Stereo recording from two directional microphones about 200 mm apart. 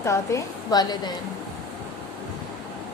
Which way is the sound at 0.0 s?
15° left (ahead or behind).